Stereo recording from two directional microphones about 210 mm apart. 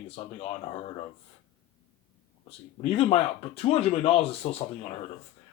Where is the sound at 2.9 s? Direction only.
25° left (ahead or behind).